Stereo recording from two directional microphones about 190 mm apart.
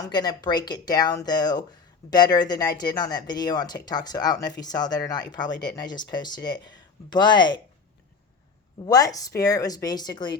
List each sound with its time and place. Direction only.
0.0 s speech: 20° left (ahead or behind)
8.8 s speech: 20° left (ahead or behind)